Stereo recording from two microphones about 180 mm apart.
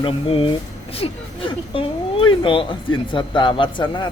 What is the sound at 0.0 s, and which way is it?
Speech, 30° left (ahead or behind).